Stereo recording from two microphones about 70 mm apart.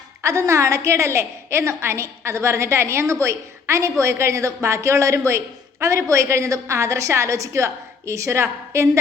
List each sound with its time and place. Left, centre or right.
0.2 s a woman's voice: right